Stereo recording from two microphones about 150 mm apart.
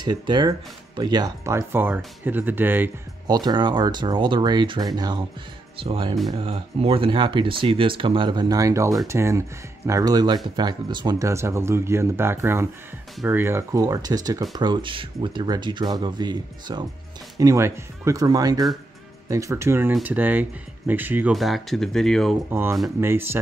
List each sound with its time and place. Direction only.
0.0 s speech: 30° right (ahead or behind); by 2.9 s 15° right (ahead or behind)
3.3 s speech: 30° right (ahead or behind); by 21.3 s 10° right (ahead or behind)
21.3 s speech: centre (ahead or behind)
22.5 s speech: 15° right (ahead or behind)